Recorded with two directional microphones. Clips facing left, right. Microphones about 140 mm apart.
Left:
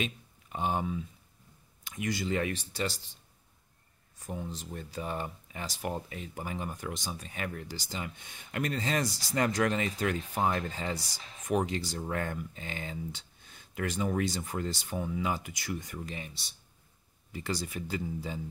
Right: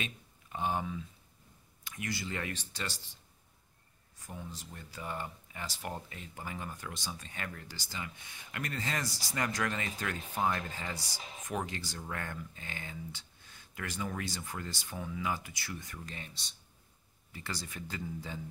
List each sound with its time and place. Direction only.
0.0 s speech: 20° left (ahead or behind)
4.3 s speech: 20° left (ahead or behind)
11.1 s music: 10° right (ahead or behind)
11.4 s speech: 20° left (ahead or behind)
17.3 s speech: 15° left (ahead or behind)